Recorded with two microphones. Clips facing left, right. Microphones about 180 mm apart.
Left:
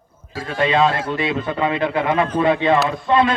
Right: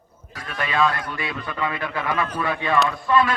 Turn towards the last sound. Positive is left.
turn(degrees=25)  # may be behind; listen again after turning